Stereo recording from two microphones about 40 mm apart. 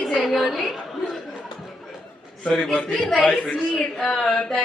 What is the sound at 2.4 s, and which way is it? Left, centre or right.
A man's voice, centre.